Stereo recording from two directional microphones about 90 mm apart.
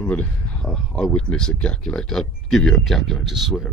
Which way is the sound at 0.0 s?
15° left (ahead or behind).